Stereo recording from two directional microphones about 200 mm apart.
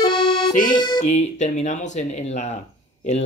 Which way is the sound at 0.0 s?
25° left (ahead or behind).